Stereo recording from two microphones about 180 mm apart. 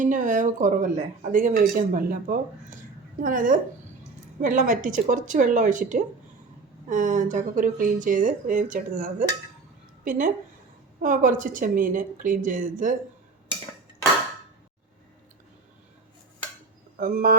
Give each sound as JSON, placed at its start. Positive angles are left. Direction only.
{"t": 0.0, "sound": "speech", "side_deg": -45}
{"t": 17.0, "sound": "speech", "side_deg": -50}